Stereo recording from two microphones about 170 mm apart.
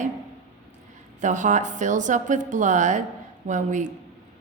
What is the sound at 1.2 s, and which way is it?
Speech, 45° right (ahead or behind).